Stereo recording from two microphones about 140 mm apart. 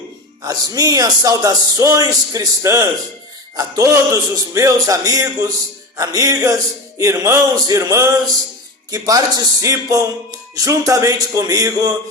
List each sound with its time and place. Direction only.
0.4 s speech: 25° right (ahead or behind)